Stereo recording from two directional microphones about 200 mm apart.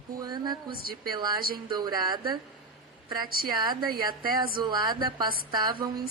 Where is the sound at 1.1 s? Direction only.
20° right (ahead or behind).